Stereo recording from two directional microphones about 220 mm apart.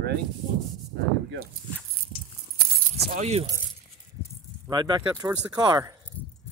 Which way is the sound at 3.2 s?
30° right (ahead or behind).